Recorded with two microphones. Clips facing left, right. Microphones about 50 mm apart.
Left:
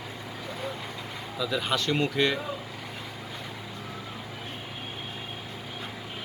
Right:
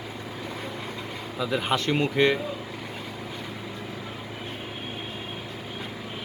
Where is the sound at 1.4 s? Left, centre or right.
Right.